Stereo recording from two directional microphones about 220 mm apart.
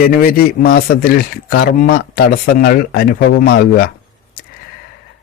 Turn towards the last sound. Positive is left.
turn(degrees=45)  # may be behind; listen again after turning